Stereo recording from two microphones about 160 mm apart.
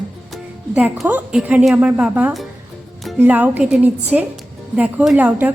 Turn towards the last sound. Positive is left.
turn(degrees=-10)  # may be behind; listen again after turning